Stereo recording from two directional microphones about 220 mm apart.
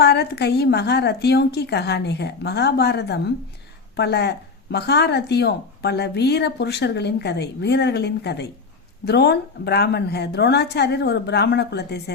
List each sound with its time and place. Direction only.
0.0 s speech: 45° left (ahead or behind)